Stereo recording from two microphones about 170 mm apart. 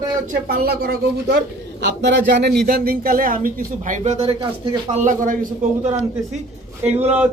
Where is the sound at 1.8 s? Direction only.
90° right; by 6.0 s 45° right (ahead or behind).